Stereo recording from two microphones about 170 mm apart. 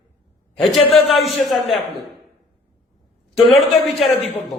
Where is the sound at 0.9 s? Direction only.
35° left (ahead or behind).